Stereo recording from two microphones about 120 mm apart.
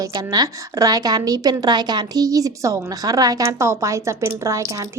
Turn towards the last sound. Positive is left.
turn(degrees=-25)  # may be behind; listen again after turning